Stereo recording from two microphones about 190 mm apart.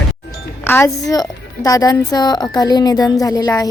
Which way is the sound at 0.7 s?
15° left (ahead or behind).